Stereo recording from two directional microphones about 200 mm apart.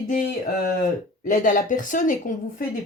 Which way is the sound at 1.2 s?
40° left (ahead or behind).